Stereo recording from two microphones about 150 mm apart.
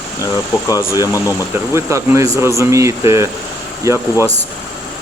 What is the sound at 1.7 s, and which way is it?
Speech, 20° right (ahead or behind).